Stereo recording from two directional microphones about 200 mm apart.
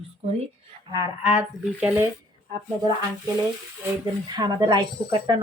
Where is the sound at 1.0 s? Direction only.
10° right (ahead or behind).